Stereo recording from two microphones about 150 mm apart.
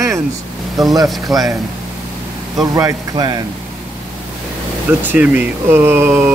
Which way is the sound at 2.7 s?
25° right (ahead or behind).